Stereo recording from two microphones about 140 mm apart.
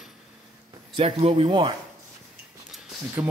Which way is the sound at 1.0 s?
45° right (ahead or behind).